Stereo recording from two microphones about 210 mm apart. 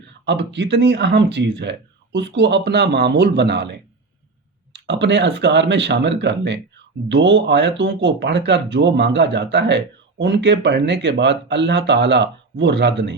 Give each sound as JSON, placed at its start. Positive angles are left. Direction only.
{"t": 0.3, "sound": "speech", "side_deg": -55}